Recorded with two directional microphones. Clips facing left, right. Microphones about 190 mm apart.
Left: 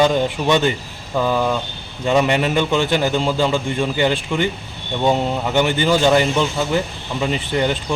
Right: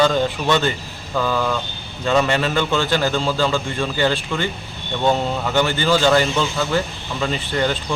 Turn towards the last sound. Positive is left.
turn(degrees=20)  # may be behind; listen again after turning